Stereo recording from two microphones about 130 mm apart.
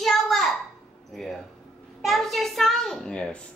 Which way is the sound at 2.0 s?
Centre (ahead or behind).